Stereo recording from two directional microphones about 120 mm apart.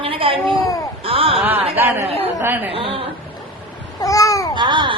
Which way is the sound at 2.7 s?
50° right (ahead or behind).